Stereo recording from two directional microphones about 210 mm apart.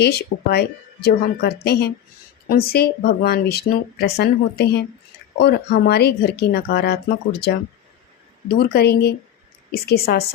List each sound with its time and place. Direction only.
0.0 s speech: 50° left (ahead or behind)
8.4 s speech: 50° left (ahead or behind)